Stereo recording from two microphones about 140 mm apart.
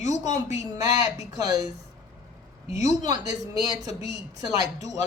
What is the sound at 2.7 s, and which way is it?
Speech, 25° right (ahead or behind).